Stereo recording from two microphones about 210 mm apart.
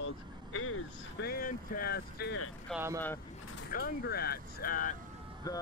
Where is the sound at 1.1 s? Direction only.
45° left (ahead or behind).